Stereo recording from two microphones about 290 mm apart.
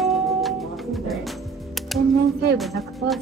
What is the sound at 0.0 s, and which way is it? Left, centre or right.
Music, centre.